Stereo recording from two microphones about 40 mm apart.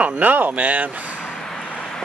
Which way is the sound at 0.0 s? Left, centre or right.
Right.